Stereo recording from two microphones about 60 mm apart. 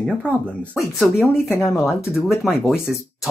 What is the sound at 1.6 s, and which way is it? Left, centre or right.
Speech, centre.